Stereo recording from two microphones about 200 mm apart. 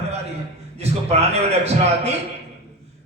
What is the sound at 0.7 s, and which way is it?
A man's voice, 30° right (ahead or behind).